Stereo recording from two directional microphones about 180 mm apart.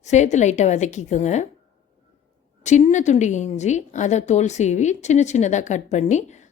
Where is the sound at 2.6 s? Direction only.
40° left (ahead or behind).